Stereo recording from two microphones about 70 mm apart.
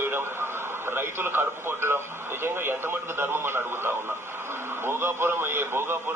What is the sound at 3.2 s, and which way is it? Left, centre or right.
A man's voice, right.